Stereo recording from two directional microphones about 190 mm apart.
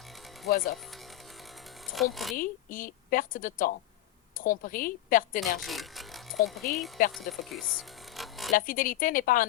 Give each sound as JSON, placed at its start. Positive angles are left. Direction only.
{"t": 0.4, "sound": "a woman's voice", "side_deg": 50}
{"t": 1.9, "sound": "speech", "side_deg": 0}
{"t": 2.3, "sound": "a woman's voice", "side_deg": 45}
{"t": 5.4, "sound": "speech", "side_deg": 0}
{"t": 8.5, "sound": "a woman's voice", "side_deg": 45}